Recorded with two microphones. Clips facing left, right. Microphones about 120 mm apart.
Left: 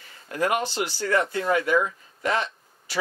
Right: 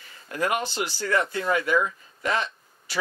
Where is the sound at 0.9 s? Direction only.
40° left (ahead or behind).